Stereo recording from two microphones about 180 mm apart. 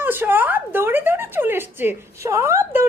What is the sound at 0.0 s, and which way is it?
Speech, 10° right (ahead or behind).